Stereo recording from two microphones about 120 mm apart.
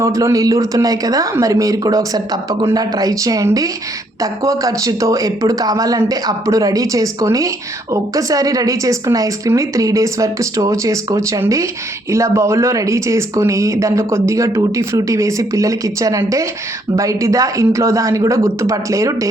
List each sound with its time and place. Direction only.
0.0 s speech: 25° right (ahead or behind)